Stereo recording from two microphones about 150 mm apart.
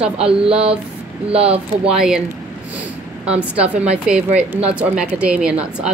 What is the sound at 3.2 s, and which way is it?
A woman's voice, 10° right (ahead or behind).